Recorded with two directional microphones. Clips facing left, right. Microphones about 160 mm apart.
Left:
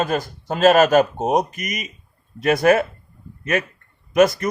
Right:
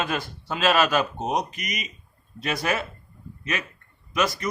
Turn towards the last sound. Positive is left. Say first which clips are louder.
# left 10 dB
turn(degrees=50)  # may be behind; listen again after turning